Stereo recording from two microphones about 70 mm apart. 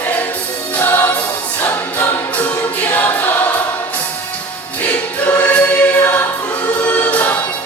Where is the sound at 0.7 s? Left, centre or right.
Left.